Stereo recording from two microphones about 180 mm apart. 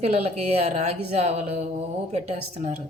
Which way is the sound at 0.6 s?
40° right (ahead or behind).